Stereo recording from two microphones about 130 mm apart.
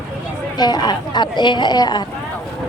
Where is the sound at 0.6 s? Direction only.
30° left (ahead or behind).